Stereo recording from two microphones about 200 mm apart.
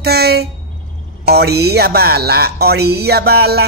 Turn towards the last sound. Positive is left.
turn(degrees=-55)  # may be behind; listen again after turning